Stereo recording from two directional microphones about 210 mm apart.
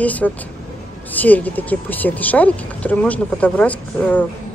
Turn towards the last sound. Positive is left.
turn(degrees=5)  # may be behind; listen again after turning